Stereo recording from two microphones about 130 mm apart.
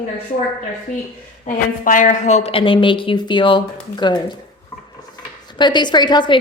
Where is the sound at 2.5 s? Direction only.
45° left (ahead or behind).